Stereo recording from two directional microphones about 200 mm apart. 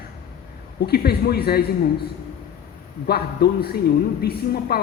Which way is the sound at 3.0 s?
50° left (ahead or behind).